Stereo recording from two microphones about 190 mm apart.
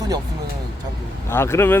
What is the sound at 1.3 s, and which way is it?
Speech, 15° left (ahead or behind).